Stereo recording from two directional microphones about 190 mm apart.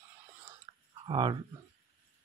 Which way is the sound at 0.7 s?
20° right (ahead or behind).